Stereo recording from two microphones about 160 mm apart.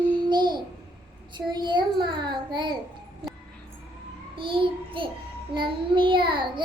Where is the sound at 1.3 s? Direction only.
30° right (ahead or behind).